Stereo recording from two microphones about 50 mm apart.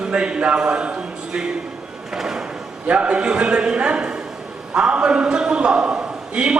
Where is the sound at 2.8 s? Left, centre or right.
Right.